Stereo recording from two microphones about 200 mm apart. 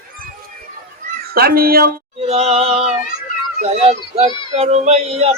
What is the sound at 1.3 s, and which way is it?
Speech, 50° right (ahead or behind).